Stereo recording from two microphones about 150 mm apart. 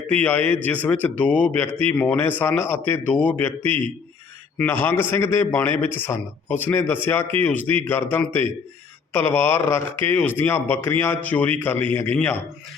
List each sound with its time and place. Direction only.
0.1 s a man's voice: 10° left (ahead or behind)